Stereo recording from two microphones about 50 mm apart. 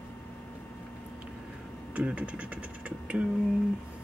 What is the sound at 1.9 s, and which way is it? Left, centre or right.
Speech, right.